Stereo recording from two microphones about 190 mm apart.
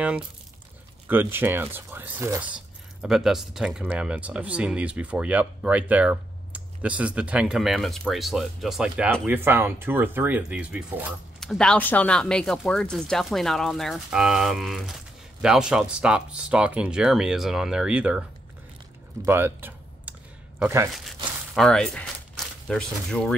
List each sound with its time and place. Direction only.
1.0 s speech: 10° right (ahead or behind)
19.2 s computer keyboard: 10° right (ahead or behind)
20.9 s speech: centre (ahead or behind)